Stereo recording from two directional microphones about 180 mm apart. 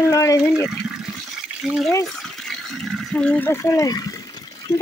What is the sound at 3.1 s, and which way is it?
Speech, 5° left (ahead or behind).